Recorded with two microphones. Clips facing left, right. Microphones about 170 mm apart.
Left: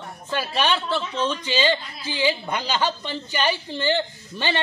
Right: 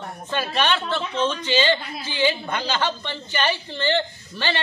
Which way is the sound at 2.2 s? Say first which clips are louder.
Right 1 dB; 15° left (ahead or behind).